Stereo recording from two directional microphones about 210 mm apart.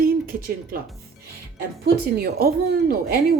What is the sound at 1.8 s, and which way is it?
Speech, 45° right (ahead or behind).